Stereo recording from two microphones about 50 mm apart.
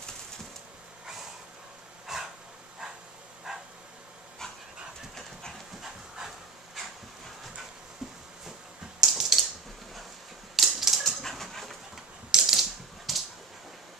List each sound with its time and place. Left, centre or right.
2.1 s dog: centre
3.5 s bow-wow: centre
5.8 s dog: centre
9.0 s mechanisms: centre
10.5 s dog: centre
12.3 s typing: centre
12.5 s typewriter: centre